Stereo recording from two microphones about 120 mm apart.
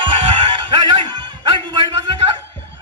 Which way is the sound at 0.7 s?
35° right (ahead or behind).